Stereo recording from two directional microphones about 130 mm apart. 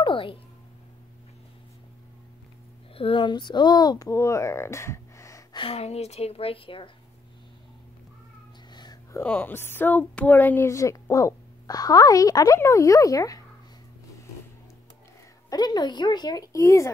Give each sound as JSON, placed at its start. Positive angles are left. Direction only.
{"t": 0.0, "sound": "a sound", "side_deg": 40}
{"t": 2.9, "sound": "a child's voice", "side_deg": 45}
{"t": 5.6, "sound": "a woman's voice", "side_deg": 50}
{"t": 8.7, "sound": "a sound", "side_deg": 30}
{"t": 9.2, "sound": "speech", "side_deg": 15}
{"t": 15.5, "sound": "speech", "side_deg": 30}